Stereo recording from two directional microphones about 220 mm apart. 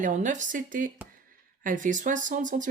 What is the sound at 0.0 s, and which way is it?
Speech, 35° right (ahead or behind).